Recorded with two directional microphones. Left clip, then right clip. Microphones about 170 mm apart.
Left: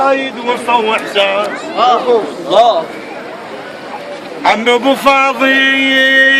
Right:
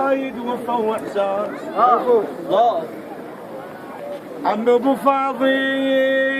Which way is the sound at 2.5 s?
60° left (ahead or behind).